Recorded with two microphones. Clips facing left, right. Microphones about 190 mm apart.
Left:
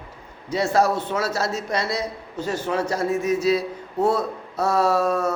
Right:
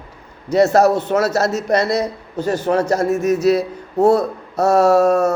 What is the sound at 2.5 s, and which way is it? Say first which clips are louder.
Speech: right 7 dB; 45° right (ahead or behind).